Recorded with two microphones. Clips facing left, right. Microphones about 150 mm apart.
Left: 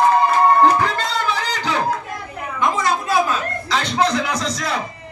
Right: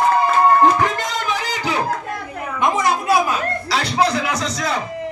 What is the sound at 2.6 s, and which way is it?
A woman's voice, 20° right (ahead or behind).